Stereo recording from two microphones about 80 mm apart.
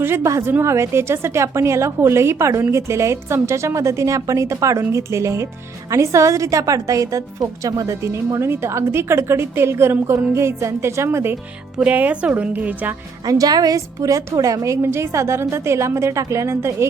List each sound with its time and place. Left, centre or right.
0.0 s a woman's voice: right
11.8 s speech: centre
13.2 s a woman's voice: right